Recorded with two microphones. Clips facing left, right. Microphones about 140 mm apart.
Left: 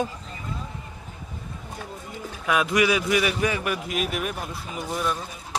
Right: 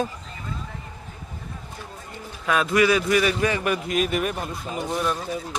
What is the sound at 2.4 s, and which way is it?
A man's voice, 10° left (ahead or behind).